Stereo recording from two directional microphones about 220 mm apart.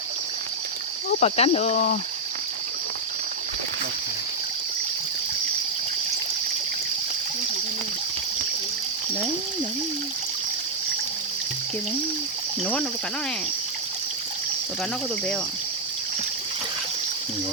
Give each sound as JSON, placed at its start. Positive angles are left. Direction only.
{"t": 1.2, "sound": "speech", "side_deg": 30}